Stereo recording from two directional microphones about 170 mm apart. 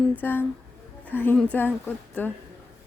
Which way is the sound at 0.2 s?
10° left (ahead or behind).